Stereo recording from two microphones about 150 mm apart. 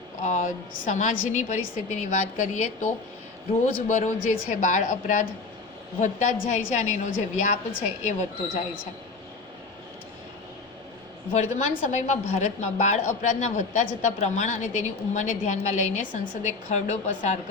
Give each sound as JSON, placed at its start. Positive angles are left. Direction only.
{"t": 0.2, "sound": "a woman's voice", "side_deg": 55}
{"t": 11.3, "sound": "a woman's voice", "side_deg": 50}